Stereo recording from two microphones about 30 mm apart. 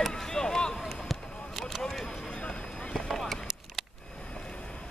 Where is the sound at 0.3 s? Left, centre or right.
Left.